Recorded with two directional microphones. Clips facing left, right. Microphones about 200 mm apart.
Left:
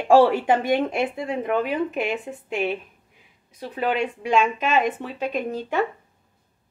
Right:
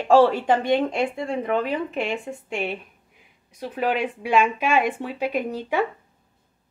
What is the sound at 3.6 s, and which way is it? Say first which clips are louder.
Speech: even; 10° right (ahead or behind).